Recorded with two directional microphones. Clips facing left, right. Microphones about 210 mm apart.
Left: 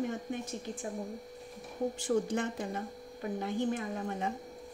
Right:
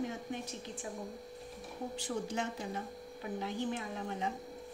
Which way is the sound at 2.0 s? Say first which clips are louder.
Left 6 dB; 50° left (ahead or behind).